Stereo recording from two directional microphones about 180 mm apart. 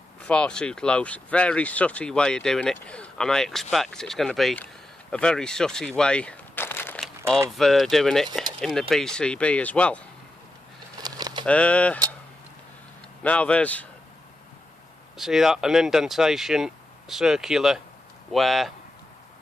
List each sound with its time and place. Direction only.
0.2 s speech: 5° left (ahead or behind)
7.2 s speech: 15° right (ahead or behind)
7.5 s speech: centre (ahead or behind)
11.0 s a sound: 20° right (ahead or behind)
11.4 s speech: 5° left (ahead or behind)
13.2 s speech: 5° left (ahead or behind)
15.1 s speech: centre (ahead or behind)